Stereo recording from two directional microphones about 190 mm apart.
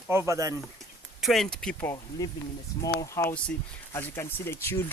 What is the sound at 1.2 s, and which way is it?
Speech, centre (ahead or behind).